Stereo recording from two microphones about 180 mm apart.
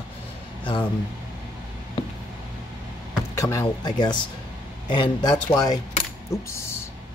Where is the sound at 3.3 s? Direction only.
20° left (ahead or behind).